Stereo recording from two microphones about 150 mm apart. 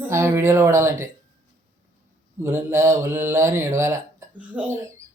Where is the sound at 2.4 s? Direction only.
15° right (ahead or behind).